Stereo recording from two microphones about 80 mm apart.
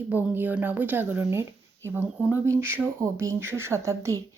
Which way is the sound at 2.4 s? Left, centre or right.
Right.